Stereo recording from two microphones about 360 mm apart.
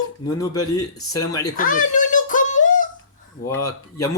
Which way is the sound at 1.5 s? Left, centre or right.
Left.